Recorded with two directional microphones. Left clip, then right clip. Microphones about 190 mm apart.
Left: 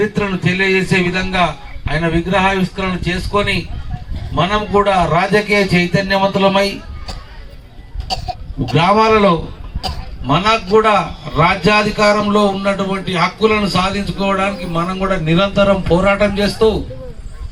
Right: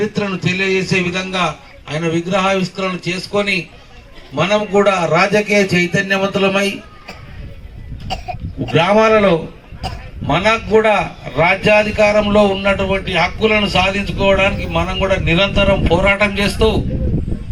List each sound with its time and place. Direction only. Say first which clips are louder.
0.0 s a man's voice: left 2 dB; 10° left (ahead or behind); by 6.6 s 50° left (ahead or behind)
8.7 s a man's voice: even; 60° left (ahead or behind)